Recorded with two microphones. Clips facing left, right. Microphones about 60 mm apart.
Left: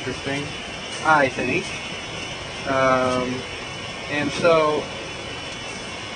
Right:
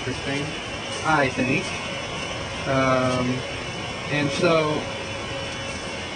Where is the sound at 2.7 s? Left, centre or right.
Centre.